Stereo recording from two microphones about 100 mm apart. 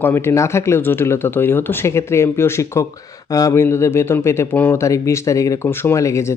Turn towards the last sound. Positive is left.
turn(degrees=30)  # may be behind; listen again after turning